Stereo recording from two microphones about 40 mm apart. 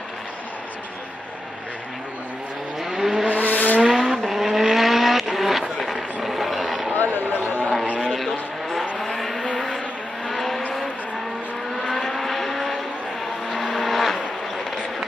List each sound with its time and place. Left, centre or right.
2.8 s vehicle: centre
3.3 s vehicle: left
3.9 s vehicle: centre
6.9 s a sound: left
8.2 s vehicle: centre
12.1 s vehicle: centre